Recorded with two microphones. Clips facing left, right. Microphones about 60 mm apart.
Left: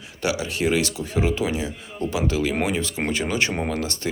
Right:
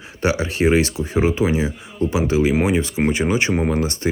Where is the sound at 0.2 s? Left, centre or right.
Right.